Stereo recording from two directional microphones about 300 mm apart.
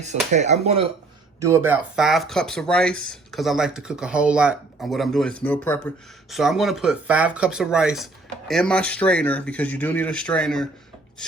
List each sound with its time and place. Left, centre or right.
0.3 s speech: right
1.4 s speech: centre